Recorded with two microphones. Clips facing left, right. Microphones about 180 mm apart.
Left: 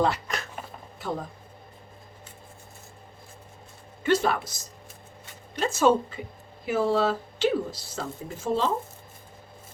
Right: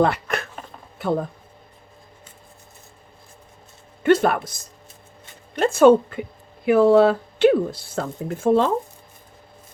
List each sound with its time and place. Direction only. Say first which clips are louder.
0.0 s a sound: right 5 dB; 60° right (ahead or behind)
0.9 s speech: right 9 dB; 60° right (ahead or behind)
4.0 s speech: right 6 dB; 55° right (ahead or behind)